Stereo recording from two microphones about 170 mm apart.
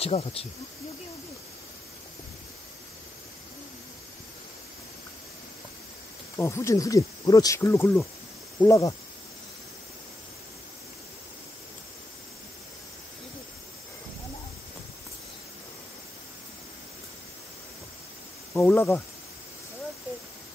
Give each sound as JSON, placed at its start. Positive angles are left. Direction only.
{"t": 0.0, "sound": "speech", "side_deg": 35}
{"t": 6.3, "sound": "speech", "side_deg": 15}
{"t": 18.5, "sound": "speech", "side_deg": 15}